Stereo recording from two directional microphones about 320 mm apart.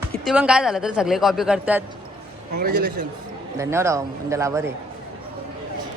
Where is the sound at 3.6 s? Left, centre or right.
Centre.